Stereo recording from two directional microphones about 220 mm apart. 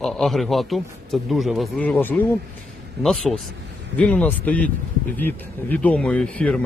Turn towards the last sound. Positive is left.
turn(degrees=5)  # may be behind; listen again after turning